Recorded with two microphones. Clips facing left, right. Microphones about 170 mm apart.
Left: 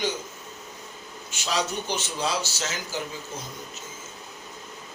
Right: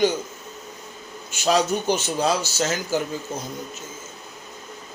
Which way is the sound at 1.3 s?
50° right (ahead or behind).